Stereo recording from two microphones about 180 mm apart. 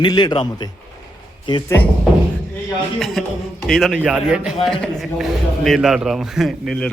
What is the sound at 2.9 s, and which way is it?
A man's voice, centre (ahead or behind).